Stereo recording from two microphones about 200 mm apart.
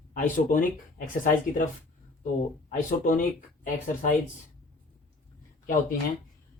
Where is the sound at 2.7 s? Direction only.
40° left (ahead or behind).